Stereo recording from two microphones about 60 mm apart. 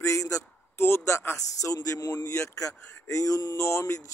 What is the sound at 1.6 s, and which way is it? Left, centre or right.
Speech, left.